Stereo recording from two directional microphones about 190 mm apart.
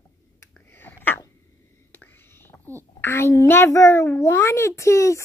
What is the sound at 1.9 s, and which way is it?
Whispering, 10° left (ahead or behind).